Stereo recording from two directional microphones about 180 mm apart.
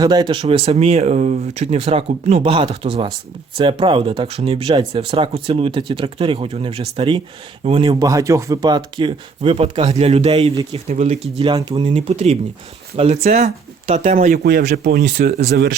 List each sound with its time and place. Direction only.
0.0 s speech: 20° right (ahead or behind)
10.5 s speech: 25° right (ahead or behind)
10.8 s speech: 40° right (ahead or behind)
11.3 s speech: 25° right (ahead or behind); by 15.4 s 60° right (ahead or behind)